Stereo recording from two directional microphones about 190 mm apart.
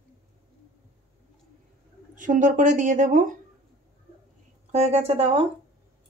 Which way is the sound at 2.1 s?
40° right (ahead or behind).